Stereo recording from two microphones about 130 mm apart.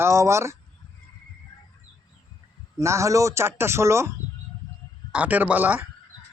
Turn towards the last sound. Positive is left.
turn(degrees=-10)  # may be behind; listen again after turning